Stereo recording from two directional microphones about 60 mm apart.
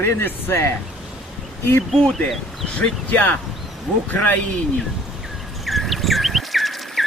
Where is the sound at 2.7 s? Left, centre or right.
Left.